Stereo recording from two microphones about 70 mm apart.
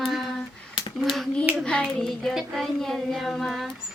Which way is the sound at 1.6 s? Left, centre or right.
Centre.